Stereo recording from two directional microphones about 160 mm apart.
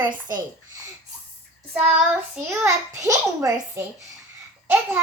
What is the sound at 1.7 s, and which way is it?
A child's voice, 10° right (ahead or behind).